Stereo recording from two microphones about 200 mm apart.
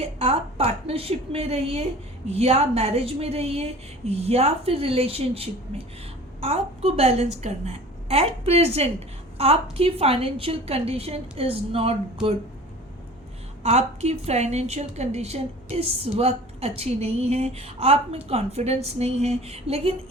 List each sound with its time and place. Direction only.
0.0 s a woman's voice: 30° right (ahead or behind)
13.6 s a woman's voice: 30° right (ahead or behind)